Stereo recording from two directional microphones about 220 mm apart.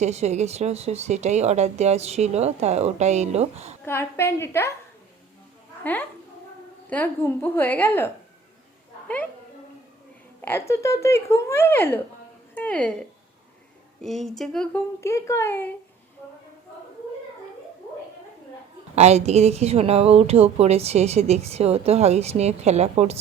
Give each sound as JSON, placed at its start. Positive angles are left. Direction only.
{"t": 0.0, "sound": "a woman's voice", "side_deg": -30}
{"t": 3.8, "sound": "speech", "side_deg": 10}
{"t": 5.8, "sound": "speech", "side_deg": 10}
{"t": 10.4, "sound": "speech", "side_deg": 10}
{"t": 18.9, "sound": "a woman's voice", "side_deg": -30}